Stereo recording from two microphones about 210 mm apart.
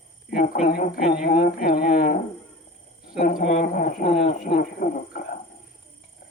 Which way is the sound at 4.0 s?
25° left (ahead or behind).